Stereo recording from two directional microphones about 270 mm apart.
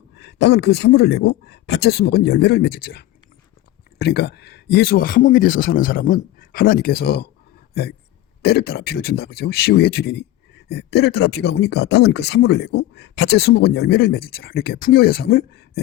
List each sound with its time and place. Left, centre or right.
0.2 s speech: left